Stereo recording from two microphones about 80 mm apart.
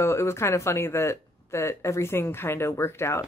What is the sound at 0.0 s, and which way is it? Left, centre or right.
Speech, left.